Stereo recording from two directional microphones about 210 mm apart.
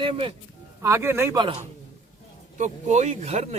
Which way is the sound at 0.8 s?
15° right (ahead or behind).